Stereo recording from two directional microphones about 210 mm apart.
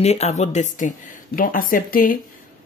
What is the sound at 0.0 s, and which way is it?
Speech, 30° left (ahead or behind).